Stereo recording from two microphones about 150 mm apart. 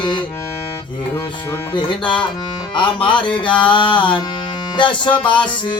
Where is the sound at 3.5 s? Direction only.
10° left (ahead or behind).